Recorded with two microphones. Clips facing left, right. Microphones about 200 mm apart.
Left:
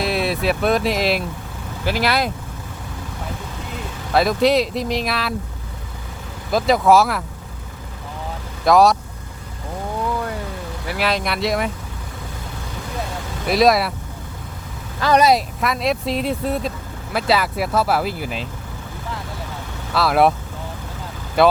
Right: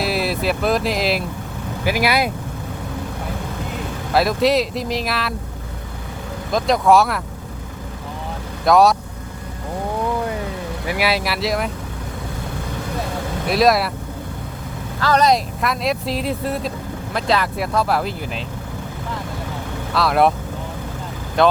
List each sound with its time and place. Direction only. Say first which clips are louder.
0.0 s speech: even; centre (ahead or behind)
1.8 s speech: right 1 dB; 10° right (ahead or behind)
4.1 s speech: left 1 dB; centre (ahead or behind)
6.5 s speech: left 1 dB; 5° left (ahead or behind)
8.6 s speech: even; centre (ahead or behind)
10.8 s speech: right 1 dB; 10° right (ahead or behind)
13.5 s speech: left 1 dB; centre (ahead or behind)
15.0 s speech: left 1 dB; 15° left (ahead or behind)
15.3 s speech: even; centre (ahead or behind)
19.9 s speech: even; centre (ahead or behind)
21.4 s speech: left 1 dB; 5° left (ahead or behind)